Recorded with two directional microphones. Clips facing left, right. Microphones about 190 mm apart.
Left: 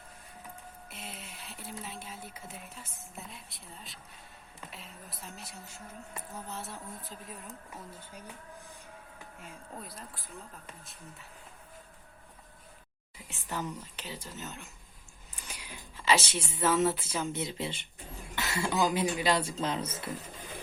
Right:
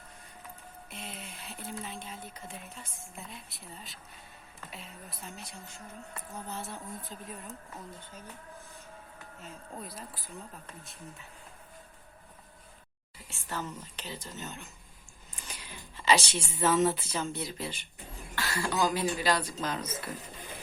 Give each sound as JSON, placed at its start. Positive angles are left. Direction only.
{"t": 0.9, "sound": "a woman's voice", "side_deg": 5}
{"t": 9.7, "sound": "a woman's voice", "side_deg": 0}
{"t": 13.2, "sound": "speech", "side_deg": 15}
{"t": 17.3, "sound": "speech", "side_deg": 25}